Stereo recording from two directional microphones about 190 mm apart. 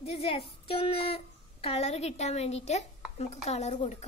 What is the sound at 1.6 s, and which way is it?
Speech, 30° left (ahead or behind).